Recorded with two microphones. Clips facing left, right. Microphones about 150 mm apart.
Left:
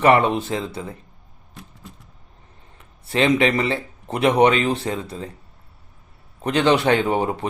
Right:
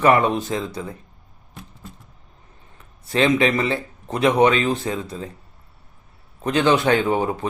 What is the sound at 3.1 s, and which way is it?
Speech, 30° left (ahead or behind).